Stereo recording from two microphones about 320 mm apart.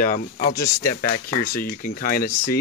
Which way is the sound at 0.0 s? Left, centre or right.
Left.